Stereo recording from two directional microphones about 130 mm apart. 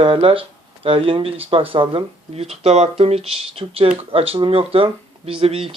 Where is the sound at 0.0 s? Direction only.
45° right (ahead or behind).